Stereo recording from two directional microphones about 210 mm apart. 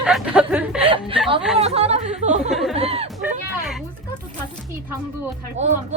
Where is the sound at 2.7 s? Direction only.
30° right (ahead or behind).